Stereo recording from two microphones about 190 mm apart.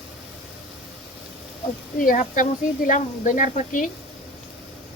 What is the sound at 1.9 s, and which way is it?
Speech, 45° left (ahead or behind).